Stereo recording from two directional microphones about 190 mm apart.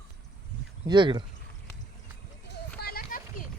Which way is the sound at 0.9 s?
25° right (ahead or behind).